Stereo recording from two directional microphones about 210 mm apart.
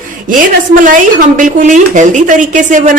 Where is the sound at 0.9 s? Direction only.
40° right (ahead or behind).